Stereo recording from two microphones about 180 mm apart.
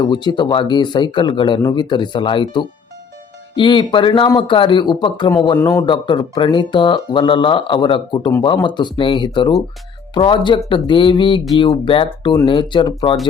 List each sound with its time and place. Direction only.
0.0 s speech: 25° left (ahead or behind)